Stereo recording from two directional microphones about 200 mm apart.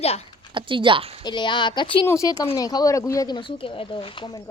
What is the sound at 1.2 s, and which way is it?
Speech, 20° left (ahead or behind).